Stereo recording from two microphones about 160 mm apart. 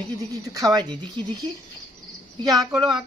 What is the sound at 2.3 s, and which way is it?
Speech, 25° right (ahead or behind).